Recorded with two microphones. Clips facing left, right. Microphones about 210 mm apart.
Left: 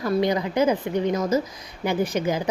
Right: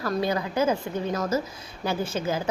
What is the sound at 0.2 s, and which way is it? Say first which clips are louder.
A woman's voice: left 3 dB; 20° left (ahead or behind).